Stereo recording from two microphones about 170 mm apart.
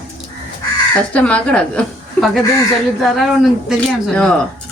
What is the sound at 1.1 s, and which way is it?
Speech, 10° left (ahead or behind).